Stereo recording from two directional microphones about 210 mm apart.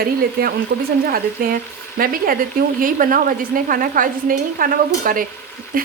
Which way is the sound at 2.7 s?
40° right (ahead or behind).